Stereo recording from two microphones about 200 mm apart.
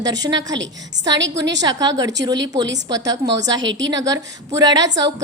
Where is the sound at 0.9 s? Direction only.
60° right (ahead or behind).